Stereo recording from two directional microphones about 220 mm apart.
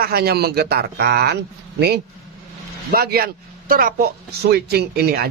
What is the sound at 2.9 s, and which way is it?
A man's voice, 45° right (ahead or behind).